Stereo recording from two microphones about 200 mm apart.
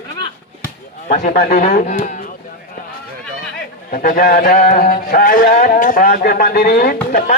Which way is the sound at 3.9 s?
45° left (ahead or behind).